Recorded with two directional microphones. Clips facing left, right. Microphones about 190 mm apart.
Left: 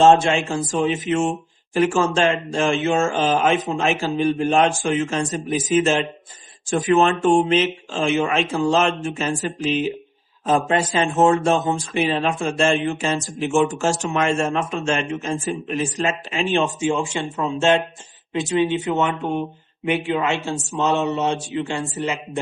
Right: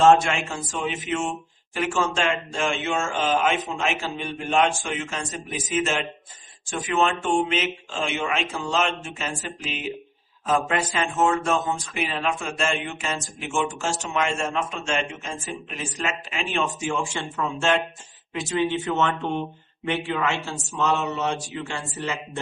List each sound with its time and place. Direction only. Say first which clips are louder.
0.0 s speech: left 3 dB; 25° left (ahead or behind)